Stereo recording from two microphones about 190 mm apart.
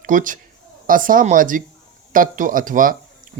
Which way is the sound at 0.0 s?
45° right (ahead or behind).